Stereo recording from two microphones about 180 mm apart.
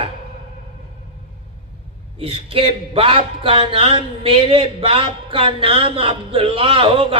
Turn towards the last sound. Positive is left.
turn(degrees=-30)  # may be behind; listen again after turning